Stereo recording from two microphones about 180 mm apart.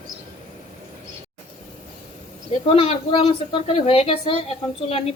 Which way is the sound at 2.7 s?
30° left (ahead or behind).